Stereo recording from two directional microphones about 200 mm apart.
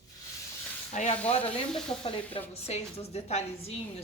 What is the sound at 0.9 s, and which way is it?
A woman's voice, 35° left (ahead or behind).